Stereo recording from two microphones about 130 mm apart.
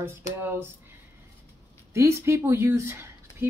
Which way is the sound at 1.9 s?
20° right (ahead or behind).